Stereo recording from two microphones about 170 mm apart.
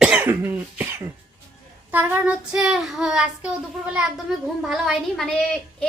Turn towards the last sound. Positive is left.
turn(degrees=5)  # may be behind; listen again after turning